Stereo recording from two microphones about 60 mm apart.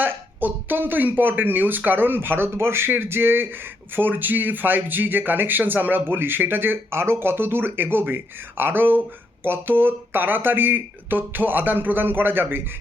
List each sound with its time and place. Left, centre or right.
0.0 s speech: right